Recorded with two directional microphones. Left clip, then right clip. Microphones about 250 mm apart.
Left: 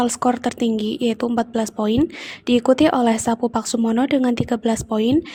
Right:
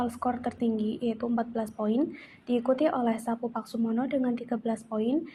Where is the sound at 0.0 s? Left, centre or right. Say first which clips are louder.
Left 11 dB; left.